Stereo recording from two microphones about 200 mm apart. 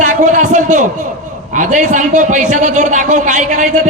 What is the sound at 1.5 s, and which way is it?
A man's voice, 40° right (ahead or behind).